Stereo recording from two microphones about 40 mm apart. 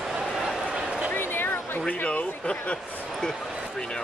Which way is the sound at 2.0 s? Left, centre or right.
Left.